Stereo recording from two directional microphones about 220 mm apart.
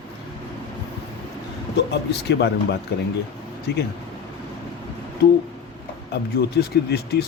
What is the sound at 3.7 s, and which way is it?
Speech, 45° left (ahead or behind).